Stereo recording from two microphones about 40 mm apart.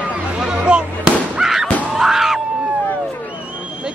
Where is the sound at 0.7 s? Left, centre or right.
Right.